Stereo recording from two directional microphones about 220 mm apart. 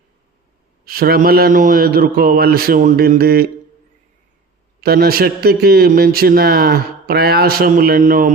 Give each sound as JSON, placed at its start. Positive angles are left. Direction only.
{"t": 0.9, "sound": "a man's voice", "side_deg": -45}
{"t": 4.8, "sound": "a man's voice", "side_deg": -45}